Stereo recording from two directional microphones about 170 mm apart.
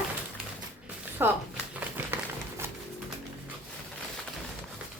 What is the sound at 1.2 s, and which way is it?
Speech, 10° right (ahead or behind).